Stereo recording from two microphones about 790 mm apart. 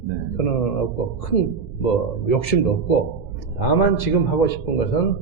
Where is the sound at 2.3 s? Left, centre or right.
Left.